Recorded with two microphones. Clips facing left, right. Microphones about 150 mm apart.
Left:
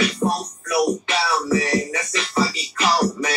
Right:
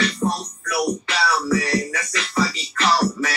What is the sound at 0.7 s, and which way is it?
Music, 20° left (ahead or behind).